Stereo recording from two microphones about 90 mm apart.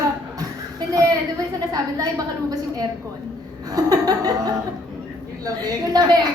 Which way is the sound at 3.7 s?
45° right (ahead or behind).